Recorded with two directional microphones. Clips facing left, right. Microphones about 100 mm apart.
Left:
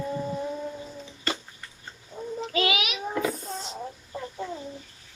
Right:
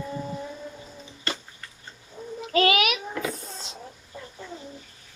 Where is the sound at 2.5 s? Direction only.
45° right (ahead or behind).